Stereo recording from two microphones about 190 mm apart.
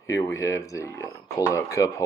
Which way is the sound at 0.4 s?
15° left (ahead or behind).